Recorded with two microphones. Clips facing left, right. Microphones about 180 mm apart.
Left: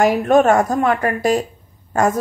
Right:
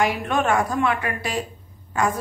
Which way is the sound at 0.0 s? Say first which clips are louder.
Left 9 dB; 45° left (ahead or behind).